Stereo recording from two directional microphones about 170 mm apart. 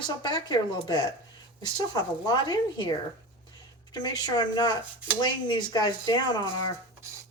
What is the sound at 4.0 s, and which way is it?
Speech, 25° left (ahead or behind).